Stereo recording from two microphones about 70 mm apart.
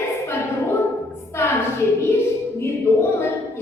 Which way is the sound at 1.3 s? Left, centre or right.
Left.